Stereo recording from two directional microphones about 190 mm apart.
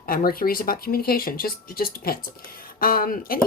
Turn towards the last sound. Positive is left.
turn(degrees=50)  # may be behind; listen again after turning